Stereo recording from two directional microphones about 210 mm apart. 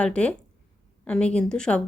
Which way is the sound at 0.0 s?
5° left (ahead or behind).